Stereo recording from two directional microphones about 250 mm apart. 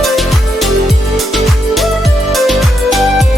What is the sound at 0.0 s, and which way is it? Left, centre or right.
Music, centre.